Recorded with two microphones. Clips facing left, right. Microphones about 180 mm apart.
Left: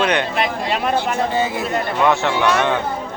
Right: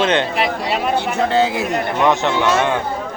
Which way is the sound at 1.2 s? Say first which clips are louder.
Right 4 dB; 80° right.